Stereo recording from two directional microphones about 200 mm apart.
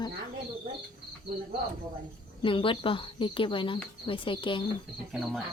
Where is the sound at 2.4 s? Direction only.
25° left (ahead or behind).